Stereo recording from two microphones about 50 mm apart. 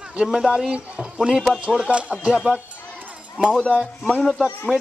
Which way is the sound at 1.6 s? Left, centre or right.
Right.